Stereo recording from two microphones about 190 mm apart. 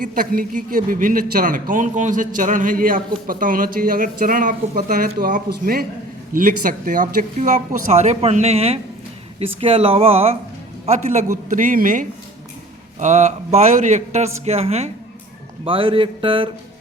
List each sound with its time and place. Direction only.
0.0 s speech: 45° right (ahead or behind)
9.6 s mantra: 30° right (ahead or behind)
10.8 s speech: 40° right (ahead or behind)
15.6 s mantra: 30° right (ahead or behind)